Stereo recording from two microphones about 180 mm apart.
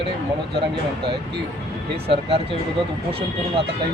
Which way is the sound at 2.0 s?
30° right (ahead or behind).